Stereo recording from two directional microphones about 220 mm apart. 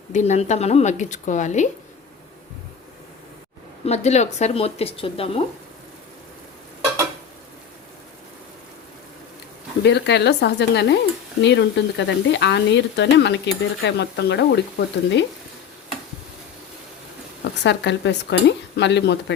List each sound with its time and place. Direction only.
0.1 s a woman's voice: 30° left (ahead or behind)
3.8 s speech: 30° left (ahead or behind)
9.8 s speech: 50° left (ahead or behind)
17.6 s speech: 55° left (ahead or behind)